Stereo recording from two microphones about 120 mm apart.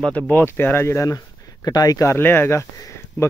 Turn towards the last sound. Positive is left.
turn(degrees=25)  # may be behind; listen again after turning